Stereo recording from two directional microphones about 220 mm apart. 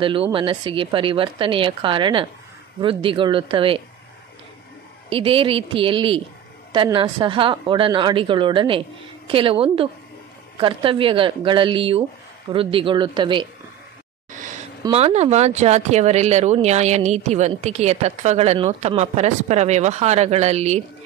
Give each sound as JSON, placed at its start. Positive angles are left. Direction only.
{"t": 0.0, "sound": "speech", "side_deg": -25}
{"t": 5.1, "sound": "speech", "side_deg": -25}
{"t": 14.8, "sound": "speech", "side_deg": -25}